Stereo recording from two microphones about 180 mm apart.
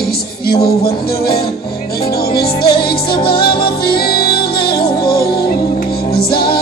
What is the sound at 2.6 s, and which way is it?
Music, 25° left (ahead or behind).